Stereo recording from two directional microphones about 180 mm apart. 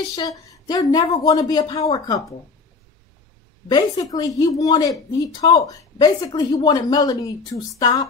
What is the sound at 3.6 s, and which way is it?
A woman's voice, 20° left (ahead or behind).